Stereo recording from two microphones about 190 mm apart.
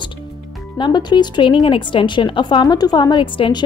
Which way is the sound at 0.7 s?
25° left (ahead or behind).